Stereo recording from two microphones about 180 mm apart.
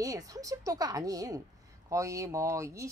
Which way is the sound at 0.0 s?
20° right (ahead or behind).